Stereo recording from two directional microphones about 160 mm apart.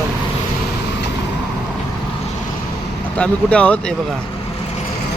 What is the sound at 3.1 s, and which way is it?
Speech, 5° left (ahead or behind).